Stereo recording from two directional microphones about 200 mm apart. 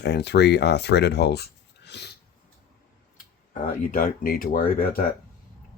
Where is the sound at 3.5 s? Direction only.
45° left (ahead or behind).